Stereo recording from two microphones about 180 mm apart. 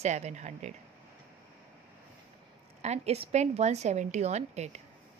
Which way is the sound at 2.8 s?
35° right (ahead or behind).